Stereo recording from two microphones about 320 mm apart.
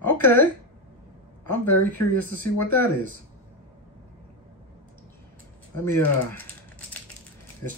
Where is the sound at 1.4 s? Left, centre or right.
Left.